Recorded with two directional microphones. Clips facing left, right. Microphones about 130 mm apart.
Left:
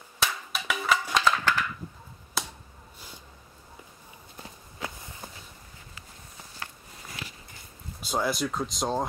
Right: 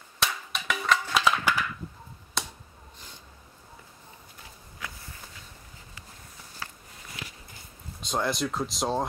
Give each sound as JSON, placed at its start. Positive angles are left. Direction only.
{"t": 0.2, "sound": "cap gun", "side_deg": 5}
{"t": 1.1, "sound": "crushing", "side_deg": -10}
{"t": 2.4, "sound": "a sound", "side_deg": 5}
{"t": 4.4, "sound": "walk", "side_deg": 30}
{"t": 8.0, "sound": "speech", "side_deg": 5}